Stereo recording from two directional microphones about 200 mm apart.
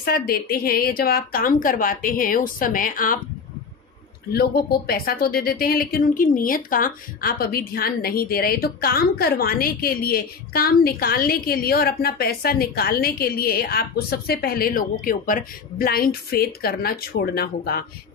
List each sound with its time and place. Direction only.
0.0 s speech: 50° left (ahead or behind)
4.3 s speech: 50° left (ahead or behind)